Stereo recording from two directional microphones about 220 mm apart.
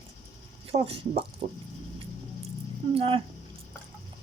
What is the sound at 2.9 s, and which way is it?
Speech, 25° right (ahead or behind).